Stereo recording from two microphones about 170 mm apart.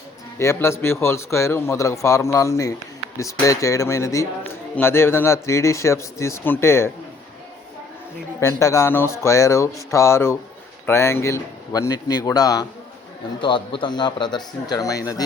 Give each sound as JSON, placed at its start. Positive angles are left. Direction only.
{"t": 0.3, "sound": "a man's voice", "side_deg": 15}
{"t": 8.4, "sound": "a man's voice", "side_deg": 15}